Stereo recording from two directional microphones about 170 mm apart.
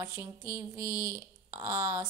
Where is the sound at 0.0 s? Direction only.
15° right (ahead or behind).